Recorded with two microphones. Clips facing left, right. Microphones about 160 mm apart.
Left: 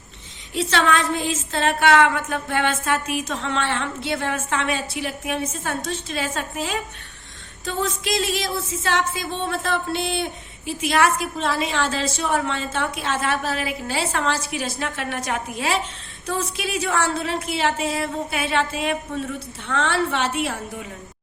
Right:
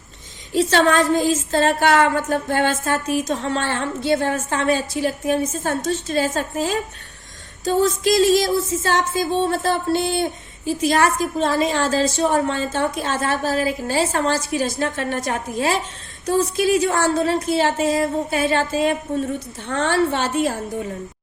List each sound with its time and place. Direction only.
0.5 s a woman's voice: 45° right (ahead or behind)
20.3 s a woman's voice: 40° right (ahead or behind)